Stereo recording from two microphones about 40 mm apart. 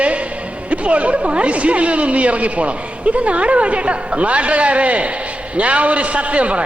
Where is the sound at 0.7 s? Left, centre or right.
Right.